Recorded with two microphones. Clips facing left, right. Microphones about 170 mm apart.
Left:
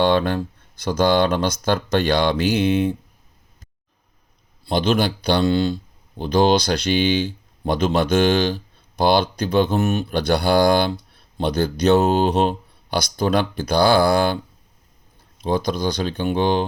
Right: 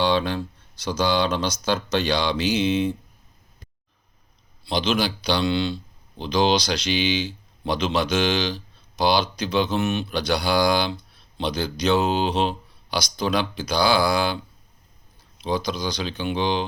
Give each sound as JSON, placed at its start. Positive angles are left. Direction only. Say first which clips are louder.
{"t": 0.0, "sound": "speech", "louder": "left 4 dB", "side_deg": 50}
{"t": 4.6, "sound": "speech", "louder": "left 4 dB", "side_deg": 50}
{"t": 15.4, "sound": "speech", "louder": "left 4 dB", "side_deg": 50}